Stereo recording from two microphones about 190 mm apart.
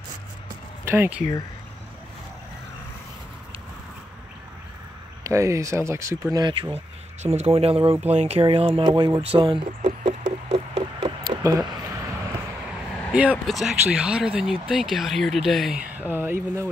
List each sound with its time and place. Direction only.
0.8 s speech: 10° right (ahead or behind)
5.2 s speech: 15° right (ahead or behind)
8.1 s a sound: 35° right (ahead or behind); by 12.4 s 20° right (ahead or behind)
13.1 s speech: 5° right (ahead or behind)